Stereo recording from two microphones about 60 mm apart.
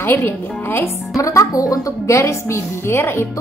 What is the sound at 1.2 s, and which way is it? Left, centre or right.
Speech, left.